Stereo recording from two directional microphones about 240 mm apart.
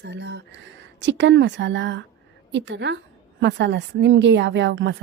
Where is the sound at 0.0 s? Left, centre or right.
Right.